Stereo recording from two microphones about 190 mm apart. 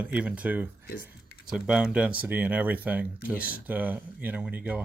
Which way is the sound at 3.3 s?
50° left (ahead or behind).